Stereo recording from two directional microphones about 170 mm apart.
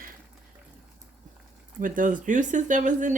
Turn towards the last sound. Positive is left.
turn(degrees=-50)  # may be behind; listen again after turning